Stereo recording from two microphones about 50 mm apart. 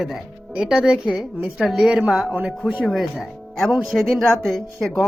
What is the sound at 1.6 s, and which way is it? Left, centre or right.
Speech, centre.